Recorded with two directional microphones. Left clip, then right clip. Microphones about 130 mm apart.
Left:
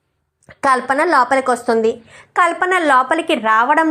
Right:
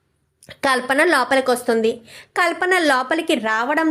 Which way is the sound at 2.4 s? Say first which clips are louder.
Left 1 dB; 20° right (ahead or behind).